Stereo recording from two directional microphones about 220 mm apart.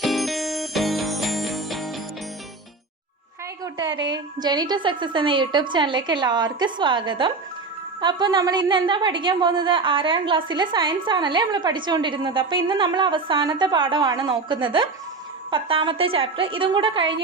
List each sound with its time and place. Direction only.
0.0 s music: centre (ahead or behind)
3.6 s a woman's voice: 20° right (ahead or behind)